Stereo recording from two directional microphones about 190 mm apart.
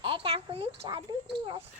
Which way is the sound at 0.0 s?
30° right (ahead or behind).